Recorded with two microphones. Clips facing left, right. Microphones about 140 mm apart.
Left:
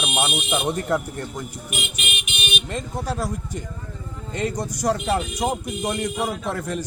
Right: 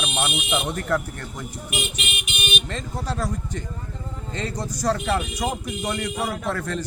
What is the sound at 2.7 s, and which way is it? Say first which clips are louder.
Speech: left 2 dB; 10° left (ahead or behind).